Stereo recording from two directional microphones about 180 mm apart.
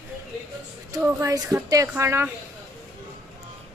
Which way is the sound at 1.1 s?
20° right (ahead or behind).